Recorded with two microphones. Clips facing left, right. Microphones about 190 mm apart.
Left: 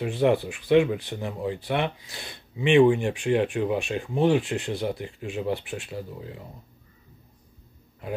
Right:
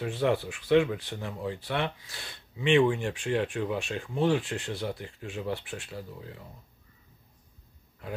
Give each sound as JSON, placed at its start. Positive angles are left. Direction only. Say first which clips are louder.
{"t": 0.0, "sound": "speech", "louder": "left 5 dB", "side_deg": 15}